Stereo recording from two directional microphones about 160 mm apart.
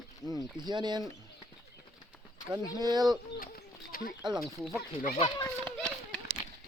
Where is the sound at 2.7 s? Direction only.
25° right (ahead or behind).